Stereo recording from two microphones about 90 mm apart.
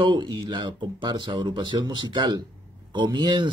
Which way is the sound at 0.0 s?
60° right (ahead or behind).